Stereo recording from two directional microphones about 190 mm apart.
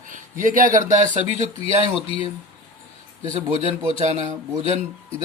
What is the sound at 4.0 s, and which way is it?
Speech, 35° right (ahead or behind).